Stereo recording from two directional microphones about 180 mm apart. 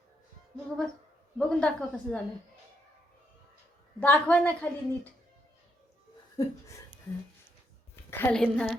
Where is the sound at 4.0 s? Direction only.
10° left (ahead or behind).